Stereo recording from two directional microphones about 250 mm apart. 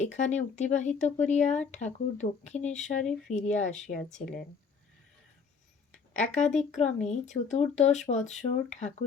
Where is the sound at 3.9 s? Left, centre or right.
Centre.